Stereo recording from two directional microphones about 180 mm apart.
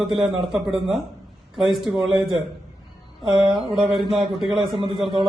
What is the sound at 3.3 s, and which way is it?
A man's voice, centre (ahead or behind).